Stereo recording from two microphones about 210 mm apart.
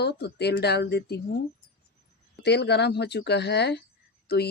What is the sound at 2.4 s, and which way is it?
Speech, 55° left (ahead or behind).